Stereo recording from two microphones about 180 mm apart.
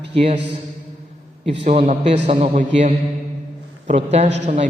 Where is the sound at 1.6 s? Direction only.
40° right (ahead or behind).